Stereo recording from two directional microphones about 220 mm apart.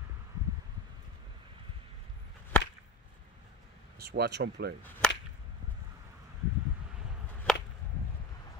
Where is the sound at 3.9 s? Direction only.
45° right (ahead or behind).